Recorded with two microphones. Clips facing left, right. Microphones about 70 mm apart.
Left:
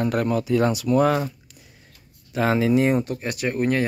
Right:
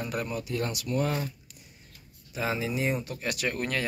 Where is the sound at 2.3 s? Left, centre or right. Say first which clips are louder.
Left 11 dB; left.